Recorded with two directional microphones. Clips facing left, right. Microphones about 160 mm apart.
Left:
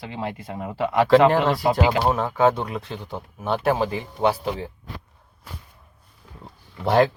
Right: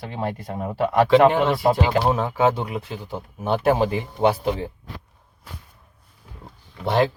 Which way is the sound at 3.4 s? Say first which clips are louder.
Right 2 dB; 25° right (ahead or behind).